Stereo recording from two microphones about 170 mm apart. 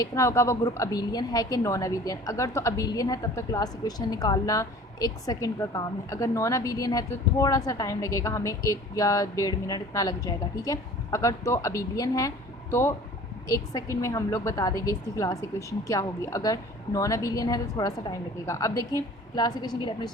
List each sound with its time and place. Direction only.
0.0 s a woman's voice: 20° left (ahead or behind)
13.5 s a woman's voice: 15° left (ahead or behind)